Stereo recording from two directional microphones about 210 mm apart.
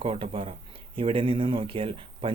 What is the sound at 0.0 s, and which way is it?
Speech, 25° right (ahead or behind).